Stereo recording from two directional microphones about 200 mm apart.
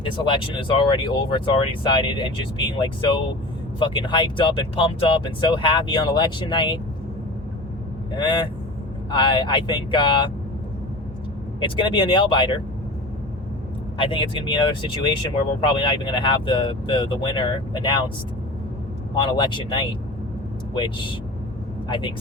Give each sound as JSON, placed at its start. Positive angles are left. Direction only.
{"t": 0.0, "sound": "speech", "side_deg": 25}
{"t": 8.1, "sound": "speech", "side_deg": 25}
{"t": 11.6, "sound": "speech", "side_deg": 25}
{"t": 14.0, "sound": "speech", "side_deg": 25}
{"t": 19.1, "sound": "speech", "side_deg": 25}